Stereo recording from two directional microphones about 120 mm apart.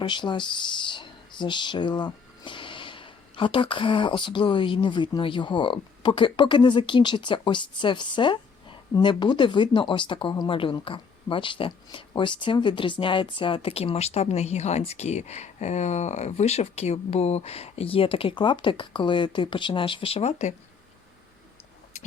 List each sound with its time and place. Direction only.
0.0 s speech: 40° left (ahead or behind); by 20.5 s 60° left (ahead or behind)